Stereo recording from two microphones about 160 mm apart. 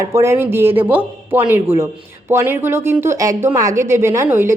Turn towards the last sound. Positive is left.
turn(degrees=-15)  # may be behind; listen again after turning